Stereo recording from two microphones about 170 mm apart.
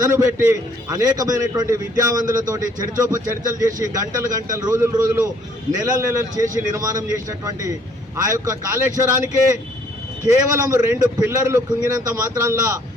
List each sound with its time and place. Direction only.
0.0 s a man's voice: 20° right (ahead or behind)